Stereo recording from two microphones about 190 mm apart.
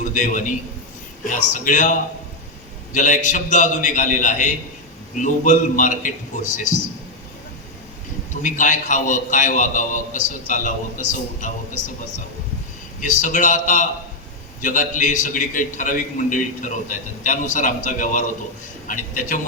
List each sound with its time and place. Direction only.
0.0 s a man's voice: 40° left (ahead or behind)
8.4 s a man's voice: 45° left (ahead or behind)
13.0 s a man's voice: 40° left (ahead or behind)